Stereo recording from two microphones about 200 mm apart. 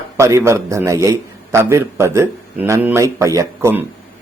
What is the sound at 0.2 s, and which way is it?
Speech, 15° right (ahead or behind).